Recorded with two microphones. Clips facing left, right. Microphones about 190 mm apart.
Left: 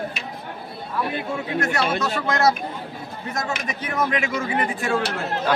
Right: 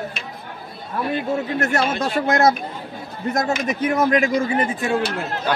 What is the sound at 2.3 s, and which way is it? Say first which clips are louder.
Speech: right 3 dB; 50° right (ahead or behind).